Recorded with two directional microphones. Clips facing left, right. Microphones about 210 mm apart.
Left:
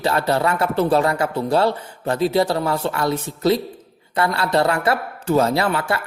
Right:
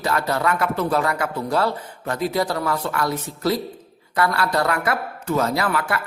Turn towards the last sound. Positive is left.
turn(degrees=25)  # may be behind; listen again after turning